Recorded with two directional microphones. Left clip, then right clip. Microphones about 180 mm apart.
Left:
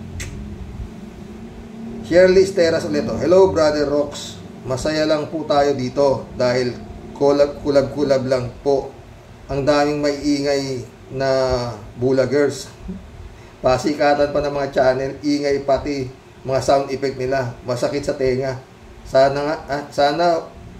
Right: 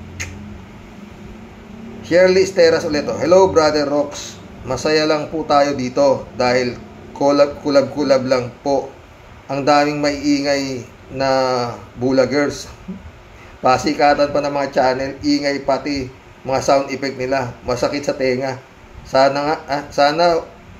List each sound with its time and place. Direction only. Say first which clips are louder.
2.0 s a man's voice: even; 10° right (ahead or behind)
13.6 s a man's voice: right 3 dB; 10° right (ahead or behind)
15.0 s speech: right 2 dB; 45° left (ahead or behind)
15.4 s a man's voice: even; 10° right (ahead or behind)